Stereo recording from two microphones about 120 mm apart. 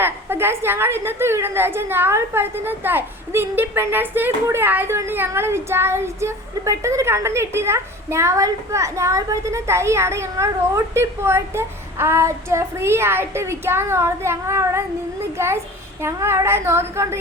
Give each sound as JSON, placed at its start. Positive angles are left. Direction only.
{"t": 0.0, "sound": "a woman's voice", "side_deg": -20}